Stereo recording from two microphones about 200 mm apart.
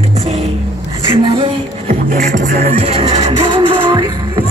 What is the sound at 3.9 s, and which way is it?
Music, 20° right (ahead or behind).